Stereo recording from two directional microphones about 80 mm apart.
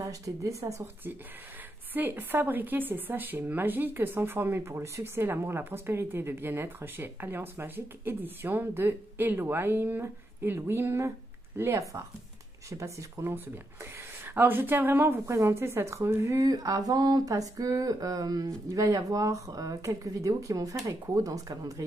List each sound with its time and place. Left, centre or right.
0.0 s speech: right
2.0 s speech: right
14.2 s speech: right
16.4 s a sound: right